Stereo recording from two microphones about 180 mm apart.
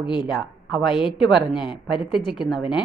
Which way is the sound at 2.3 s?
Centre (ahead or behind).